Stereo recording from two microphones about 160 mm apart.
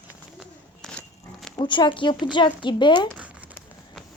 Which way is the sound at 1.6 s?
30° left (ahead or behind).